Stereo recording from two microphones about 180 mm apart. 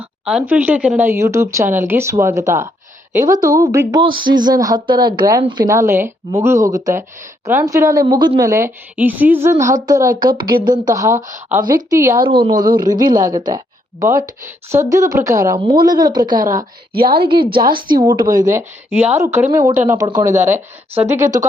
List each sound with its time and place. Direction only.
0.0 s speech: 5° right (ahead or behind); by 17.5 s 25° right (ahead or behind)
17.5 s a woman's voice: 55° right (ahead or behind)
17.9 s speech: 25° right (ahead or behind)